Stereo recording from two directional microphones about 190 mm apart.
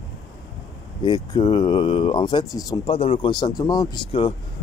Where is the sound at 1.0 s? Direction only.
25° left (ahead or behind).